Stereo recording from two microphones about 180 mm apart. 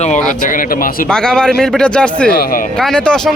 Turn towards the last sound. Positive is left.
turn(degrees=5)  # may be behind; listen again after turning